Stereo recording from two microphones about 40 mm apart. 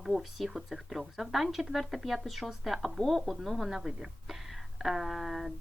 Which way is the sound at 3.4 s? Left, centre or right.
Centre.